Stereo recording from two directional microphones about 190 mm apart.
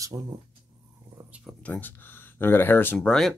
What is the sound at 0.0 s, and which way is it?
Speech, 20° right (ahead or behind).